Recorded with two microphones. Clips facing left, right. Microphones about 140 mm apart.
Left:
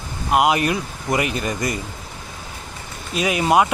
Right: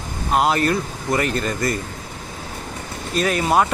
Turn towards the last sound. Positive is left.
turn(degrees=10)  # may be behind; listen again after turning